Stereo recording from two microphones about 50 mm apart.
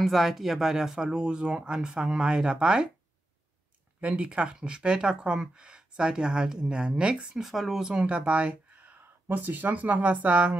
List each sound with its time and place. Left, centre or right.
0.0 s speech: centre
4.0 s speech: right
7.4 s speech: centre
7.8 s speech: right
9.3 s speech: right